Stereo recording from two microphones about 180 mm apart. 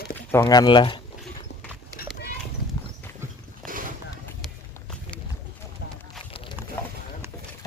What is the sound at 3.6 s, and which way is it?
Horse, 50° right (ahead or behind).